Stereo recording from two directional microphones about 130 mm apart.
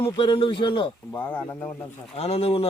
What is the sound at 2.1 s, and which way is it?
Speech, 50° left (ahead or behind).